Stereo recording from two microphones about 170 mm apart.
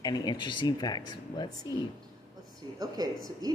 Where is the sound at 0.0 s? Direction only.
25° left (ahead or behind).